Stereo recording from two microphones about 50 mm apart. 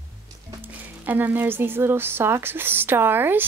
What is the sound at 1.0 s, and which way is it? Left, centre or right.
Speech, right.